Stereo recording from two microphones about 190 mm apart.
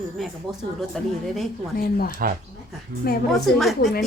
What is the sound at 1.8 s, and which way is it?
Speech, 50° left (ahead or behind).